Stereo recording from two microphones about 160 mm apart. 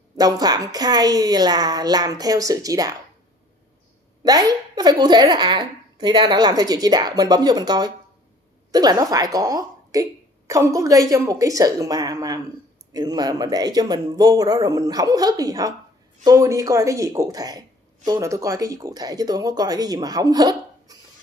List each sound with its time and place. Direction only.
0.2 s speech: 25° right (ahead or behind)
4.2 s speech: 25° right (ahead or behind)